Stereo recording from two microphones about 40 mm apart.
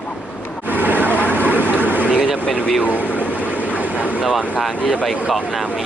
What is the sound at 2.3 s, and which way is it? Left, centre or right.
Speech, left.